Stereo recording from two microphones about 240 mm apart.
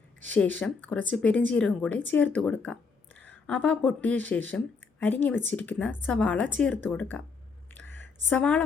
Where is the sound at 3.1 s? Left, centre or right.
Right.